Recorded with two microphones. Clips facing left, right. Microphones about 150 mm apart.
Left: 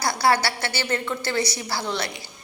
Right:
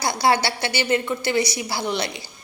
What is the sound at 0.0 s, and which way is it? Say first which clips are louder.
Speech: right 1 dB; 20° right (ahead or behind).